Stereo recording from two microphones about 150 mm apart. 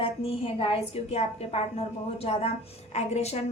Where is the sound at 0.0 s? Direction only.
40° left (ahead or behind).